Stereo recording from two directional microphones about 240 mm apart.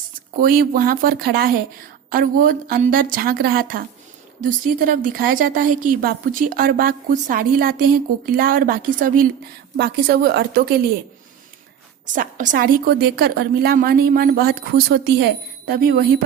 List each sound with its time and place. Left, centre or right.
0.3 s a woman's voice: right
12.0 s a woman's voice: right